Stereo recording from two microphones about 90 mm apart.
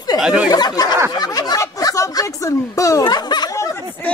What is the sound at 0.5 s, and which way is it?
Speech, 45° left (ahead or behind).